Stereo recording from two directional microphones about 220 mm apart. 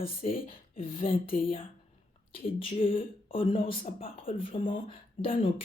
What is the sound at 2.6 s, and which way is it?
Speech, 25° left (ahead or behind).